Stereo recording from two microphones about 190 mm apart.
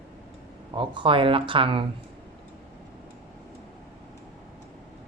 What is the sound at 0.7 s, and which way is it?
Speech, 25° right (ahead or behind).